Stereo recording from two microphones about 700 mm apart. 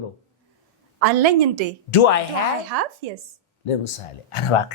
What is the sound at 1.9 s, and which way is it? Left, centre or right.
Speech, left.